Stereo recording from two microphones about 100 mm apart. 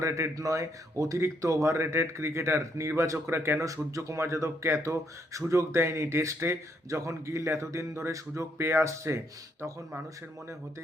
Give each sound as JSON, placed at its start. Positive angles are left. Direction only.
{"t": 0.0, "sound": "speech", "side_deg": -30}